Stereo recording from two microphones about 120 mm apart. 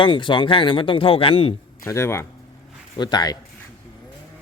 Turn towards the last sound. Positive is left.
turn(degrees=35)  # may be behind; listen again after turning